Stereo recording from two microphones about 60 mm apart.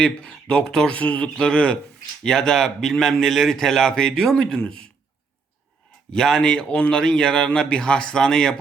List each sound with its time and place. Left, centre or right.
0.0 s a man's voice: centre
6.1 s a man's voice: centre